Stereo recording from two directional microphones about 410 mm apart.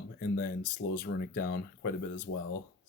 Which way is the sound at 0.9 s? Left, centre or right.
Left.